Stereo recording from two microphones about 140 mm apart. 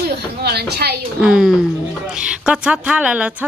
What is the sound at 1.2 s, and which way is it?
A woman's voice, 5° right (ahead or behind).